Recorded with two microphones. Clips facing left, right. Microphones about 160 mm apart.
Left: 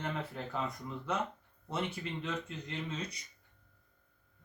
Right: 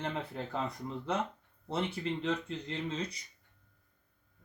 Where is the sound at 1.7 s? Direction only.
30° right (ahead or behind).